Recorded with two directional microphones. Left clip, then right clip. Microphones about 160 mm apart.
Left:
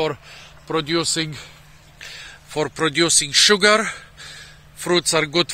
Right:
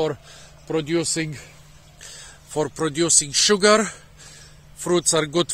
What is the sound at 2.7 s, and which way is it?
Speech, 10° right (ahead or behind).